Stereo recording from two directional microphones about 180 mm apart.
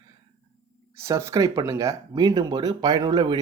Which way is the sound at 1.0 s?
15° right (ahead or behind).